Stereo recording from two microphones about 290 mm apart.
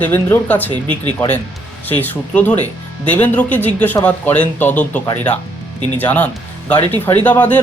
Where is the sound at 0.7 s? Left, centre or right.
Centre.